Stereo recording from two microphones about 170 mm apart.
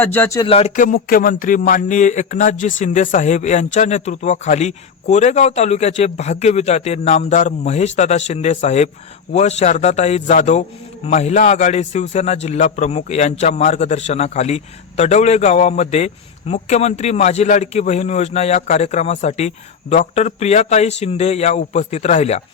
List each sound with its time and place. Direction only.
0.0 s speech: 10° left (ahead or behind)
0.3 s a man's voice: 35° left (ahead or behind)
0.8 s a man's voice: 55° left (ahead or behind)